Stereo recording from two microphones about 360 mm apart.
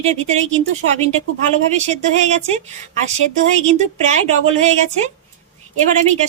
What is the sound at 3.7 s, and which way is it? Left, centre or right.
A woman's voice, centre.